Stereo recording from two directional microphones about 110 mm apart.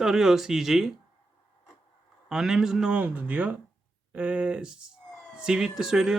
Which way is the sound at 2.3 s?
5° right (ahead or behind).